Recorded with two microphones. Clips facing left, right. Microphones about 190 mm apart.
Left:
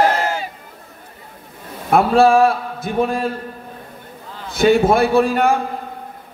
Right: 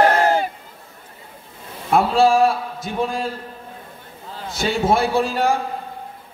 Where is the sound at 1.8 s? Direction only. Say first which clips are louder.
Left 3 dB; 55° left (ahead or behind).